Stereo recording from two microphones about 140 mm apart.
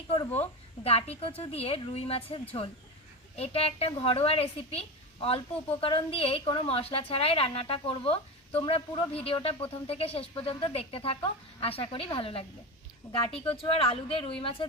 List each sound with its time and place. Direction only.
0.9 s a woman's voice: 45° left (ahead or behind)